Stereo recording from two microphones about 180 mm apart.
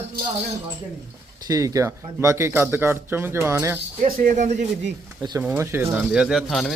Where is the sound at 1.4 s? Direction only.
20° right (ahead or behind).